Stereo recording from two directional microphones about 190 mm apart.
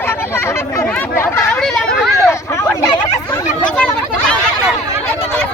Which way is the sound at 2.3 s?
15° left (ahead or behind).